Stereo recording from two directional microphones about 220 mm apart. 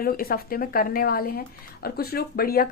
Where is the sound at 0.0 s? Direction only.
40° left (ahead or behind).